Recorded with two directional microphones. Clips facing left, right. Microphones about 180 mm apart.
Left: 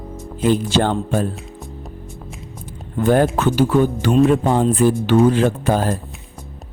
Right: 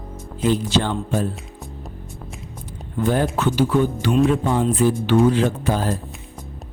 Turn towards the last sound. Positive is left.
turn(degrees=50)  # may be behind; listen again after turning